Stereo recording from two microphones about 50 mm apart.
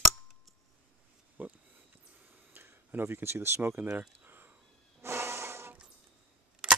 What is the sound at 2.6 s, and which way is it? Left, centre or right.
Speech, right.